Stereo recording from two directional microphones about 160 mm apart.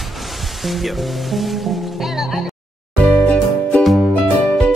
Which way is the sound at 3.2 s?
5° left (ahead or behind).